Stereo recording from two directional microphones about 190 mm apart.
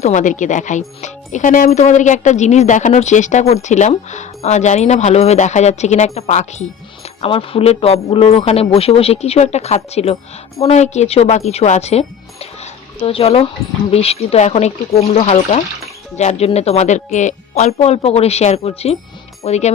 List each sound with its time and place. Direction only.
0.0 s speech: 40° left (ahead or behind)